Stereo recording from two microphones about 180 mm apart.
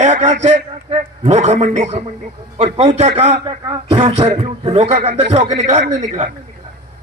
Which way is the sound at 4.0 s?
35° right (ahead or behind).